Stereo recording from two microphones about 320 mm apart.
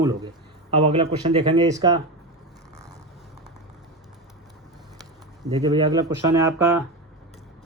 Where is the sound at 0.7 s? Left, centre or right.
Centre.